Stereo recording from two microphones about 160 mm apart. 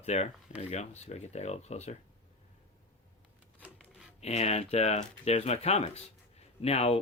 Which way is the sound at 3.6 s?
5° right (ahead or behind).